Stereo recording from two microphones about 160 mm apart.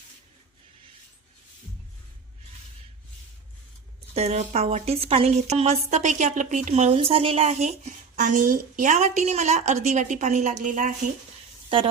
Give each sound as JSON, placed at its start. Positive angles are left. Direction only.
{"t": 4.1, "sound": "a woman's voice", "side_deg": -45}